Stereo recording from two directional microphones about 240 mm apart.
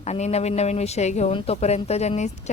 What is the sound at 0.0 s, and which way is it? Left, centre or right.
Speech, left.